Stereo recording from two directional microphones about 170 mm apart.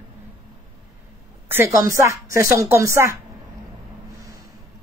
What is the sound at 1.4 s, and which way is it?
A woman's voice, 15° right (ahead or behind).